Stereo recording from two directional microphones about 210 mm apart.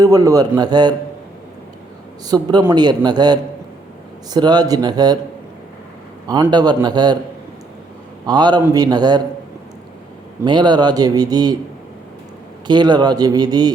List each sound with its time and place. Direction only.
0.0 s a man's voice: 15° right (ahead or behind)
2.2 s speech: 20° right (ahead or behind)
4.4 s speech: 20° right (ahead or behind)
6.2 s speech: 20° right (ahead or behind)
8.3 s speech: 20° right (ahead or behind)
10.4 s speech: 20° right (ahead or behind)
12.6 s speech: 20° right (ahead or behind)